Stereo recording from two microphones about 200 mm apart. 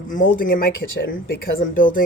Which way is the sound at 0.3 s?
45° left (ahead or behind).